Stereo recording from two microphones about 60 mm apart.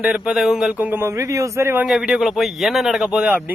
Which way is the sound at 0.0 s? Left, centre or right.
Centre.